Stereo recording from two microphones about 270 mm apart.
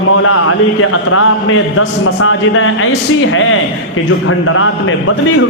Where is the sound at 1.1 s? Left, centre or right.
Left.